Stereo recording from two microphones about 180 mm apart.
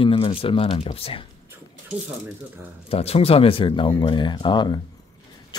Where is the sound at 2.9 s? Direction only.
35° left (ahead or behind).